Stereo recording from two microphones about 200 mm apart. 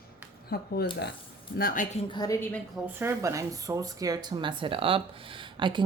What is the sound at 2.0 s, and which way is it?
Speech, 20° left (ahead or behind).